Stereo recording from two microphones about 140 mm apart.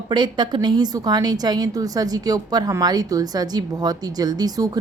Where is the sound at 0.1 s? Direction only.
30° right (ahead or behind).